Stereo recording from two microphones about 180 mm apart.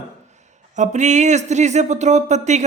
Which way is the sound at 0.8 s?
40° right (ahead or behind).